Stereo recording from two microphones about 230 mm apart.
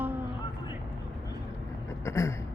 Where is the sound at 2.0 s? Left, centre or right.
Centre.